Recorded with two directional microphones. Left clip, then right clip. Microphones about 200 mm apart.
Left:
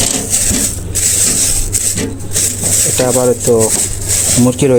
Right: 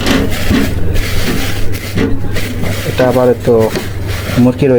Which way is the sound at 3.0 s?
20° left (ahead or behind).